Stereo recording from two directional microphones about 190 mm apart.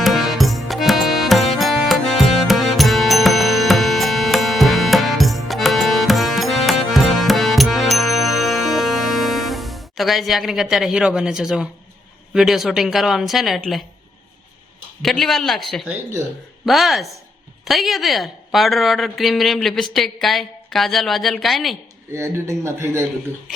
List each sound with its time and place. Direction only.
0.0 s music: centre (ahead or behind)
12.3 s a woman's voice: centre (ahead or behind)
15.0 s a woman's voice: centre (ahead or behind)
22.1 s speech: 15° right (ahead or behind)